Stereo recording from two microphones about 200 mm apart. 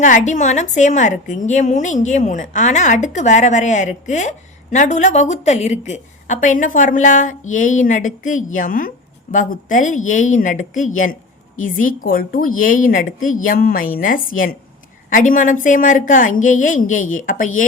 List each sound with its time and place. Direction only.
0.0 s a woman's voice: 40° left (ahead or behind)